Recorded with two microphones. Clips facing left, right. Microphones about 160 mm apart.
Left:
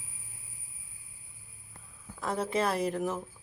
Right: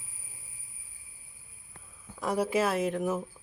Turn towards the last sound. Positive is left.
turn(degrees=-5)  # may be behind; listen again after turning